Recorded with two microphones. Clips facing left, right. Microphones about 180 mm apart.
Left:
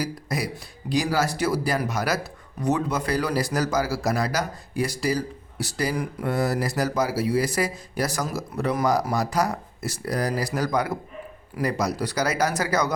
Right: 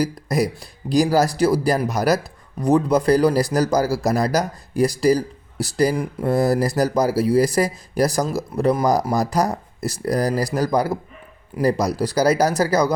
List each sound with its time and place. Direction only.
0.0 s speech: 40° right (ahead or behind)